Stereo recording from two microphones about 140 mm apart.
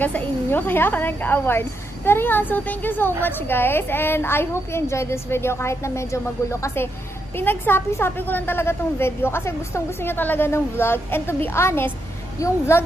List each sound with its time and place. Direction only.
0.0 s a woman's voice: 10° left (ahead or behind)